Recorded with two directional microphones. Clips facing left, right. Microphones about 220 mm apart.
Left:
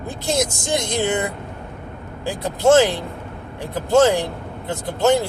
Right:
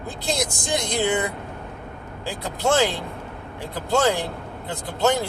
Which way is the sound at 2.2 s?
20° left (ahead or behind).